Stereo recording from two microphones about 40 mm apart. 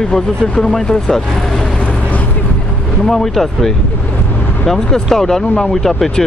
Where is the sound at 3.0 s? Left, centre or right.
Centre.